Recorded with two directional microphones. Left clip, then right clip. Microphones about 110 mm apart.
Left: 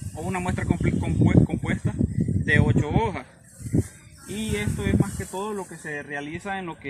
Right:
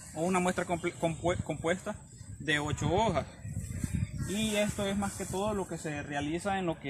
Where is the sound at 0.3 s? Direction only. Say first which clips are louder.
Left 2 dB; 25° right (ahead or behind).